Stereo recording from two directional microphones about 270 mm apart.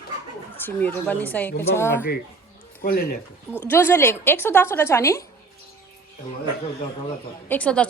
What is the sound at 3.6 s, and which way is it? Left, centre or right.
A woman's voice, centre.